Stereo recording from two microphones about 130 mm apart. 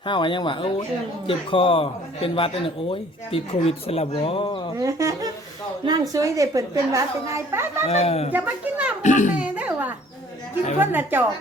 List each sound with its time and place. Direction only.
0.0 s a man's voice: 40° left (ahead or behind)
4.8 s a woman's voice: 25° right (ahead or behind)
7.9 s a man's voice: 50° left (ahead or behind)
8.3 s a sound: 15° right (ahead or behind)
9.0 s a child's voice: 70° left (ahead or behind)
9.4 s a sound: 10° right (ahead or behind)
10.8 s speech: 15° right (ahead or behind)